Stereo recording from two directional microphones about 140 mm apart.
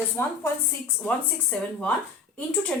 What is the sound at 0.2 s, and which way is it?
Speech, 20° left (ahead or behind).